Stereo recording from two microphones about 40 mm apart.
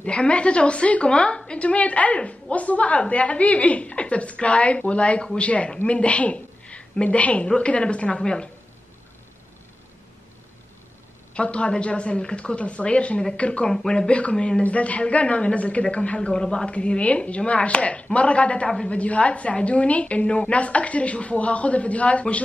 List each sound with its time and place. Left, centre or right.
0.0 s a woman's voice: left
11.3 s a woman's voice: left
14.6 s a woman's voice: left